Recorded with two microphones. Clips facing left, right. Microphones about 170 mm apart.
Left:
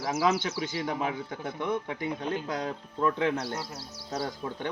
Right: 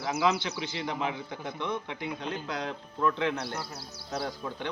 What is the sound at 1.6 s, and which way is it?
Speech, 45° left (ahead or behind).